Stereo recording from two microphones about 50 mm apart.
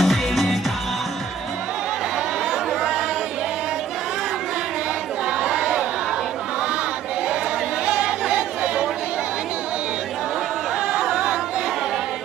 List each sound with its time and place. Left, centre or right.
0.0 s music: centre
5.4 s crowd: centre
7.8 s chatter: centre
10.9 s music: centre